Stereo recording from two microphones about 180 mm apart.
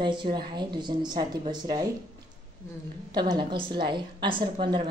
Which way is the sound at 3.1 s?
25° right (ahead or behind).